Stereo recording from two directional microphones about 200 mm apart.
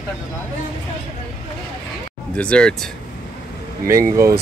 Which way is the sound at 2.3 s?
5° left (ahead or behind).